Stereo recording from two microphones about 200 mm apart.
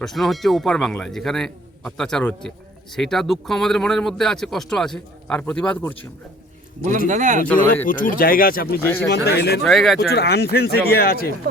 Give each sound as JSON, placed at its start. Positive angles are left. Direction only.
{"t": 0.0, "sound": "speech", "side_deg": 0}
{"t": 7.1, "sound": "speech", "side_deg": -40}
{"t": 7.9, "sound": "speech", "side_deg": 40}
{"t": 8.8, "sound": "speech", "side_deg": 10}
{"t": 9.0, "sound": "speech", "side_deg": 55}
{"t": 9.6, "sound": "speech", "side_deg": 0}
{"t": 10.1, "sound": "speech", "side_deg": 55}